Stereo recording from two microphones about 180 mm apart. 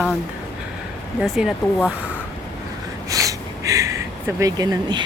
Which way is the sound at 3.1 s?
20° right (ahead or behind).